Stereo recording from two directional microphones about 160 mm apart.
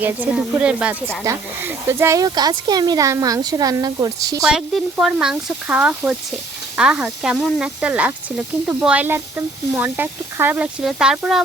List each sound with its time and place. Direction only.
0.0 s speech: 10° right (ahead or behind)
1.2 s speech: 20° right (ahead or behind)
4.4 s speech: 5° right (ahead or behind)